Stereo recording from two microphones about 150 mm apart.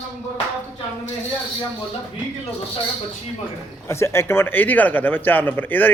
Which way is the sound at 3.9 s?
15° left (ahead or behind).